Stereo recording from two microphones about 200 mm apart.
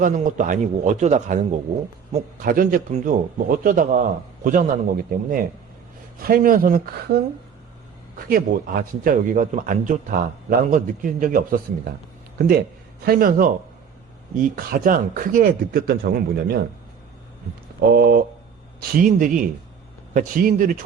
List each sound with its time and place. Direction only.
0.0 s a man's voice: 40° right (ahead or behind)
8.2 s speech: 45° right (ahead or behind)
13.1 s speech: 45° right (ahead or behind)
17.9 s speech: 50° right (ahead or behind)